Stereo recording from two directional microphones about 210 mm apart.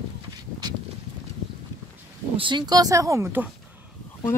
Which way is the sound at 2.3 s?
20° right (ahead or behind).